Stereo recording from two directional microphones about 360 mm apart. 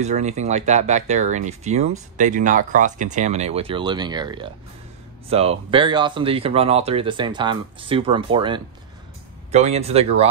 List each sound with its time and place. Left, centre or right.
0.0 s speech: centre